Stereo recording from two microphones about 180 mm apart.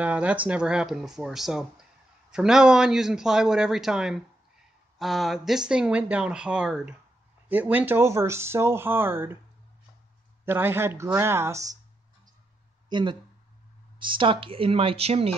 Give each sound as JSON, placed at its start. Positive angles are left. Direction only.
{"t": 0.0, "sound": "speech", "side_deg": -10}
{"t": 10.4, "sound": "speech", "side_deg": -10}
{"t": 12.9, "sound": "speech", "side_deg": -25}